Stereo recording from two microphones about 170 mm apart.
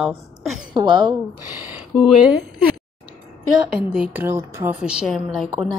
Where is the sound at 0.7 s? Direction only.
25° right (ahead or behind).